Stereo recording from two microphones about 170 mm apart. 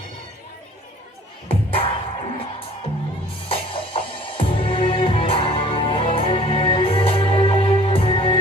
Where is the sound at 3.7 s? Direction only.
30° left (ahead or behind).